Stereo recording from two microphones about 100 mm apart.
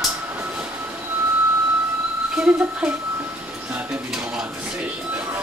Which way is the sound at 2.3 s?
10° right (ahead or behind).